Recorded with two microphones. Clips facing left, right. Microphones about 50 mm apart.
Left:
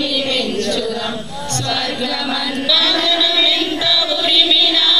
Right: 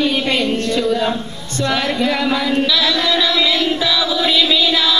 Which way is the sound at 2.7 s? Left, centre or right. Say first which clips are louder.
Even; centre.